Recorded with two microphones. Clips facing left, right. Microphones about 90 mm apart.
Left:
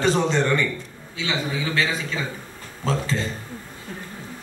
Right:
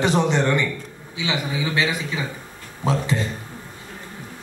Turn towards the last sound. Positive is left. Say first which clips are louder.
# right 2 dB
turn(degrees=-15)  # may be behind; listen again after turning